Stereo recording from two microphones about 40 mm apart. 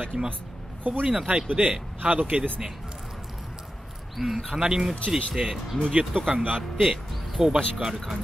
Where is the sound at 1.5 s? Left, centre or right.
Right.